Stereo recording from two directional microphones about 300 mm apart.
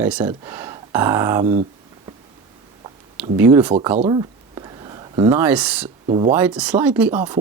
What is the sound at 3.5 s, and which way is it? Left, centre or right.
Speech, centre.